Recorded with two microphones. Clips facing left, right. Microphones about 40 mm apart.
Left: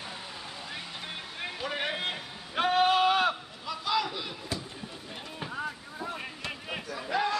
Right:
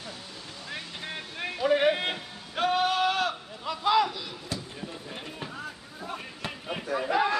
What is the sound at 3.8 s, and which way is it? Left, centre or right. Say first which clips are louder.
Run: right 6 dB; right.